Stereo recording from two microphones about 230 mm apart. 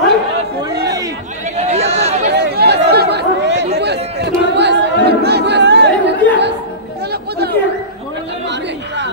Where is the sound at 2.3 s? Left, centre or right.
Right.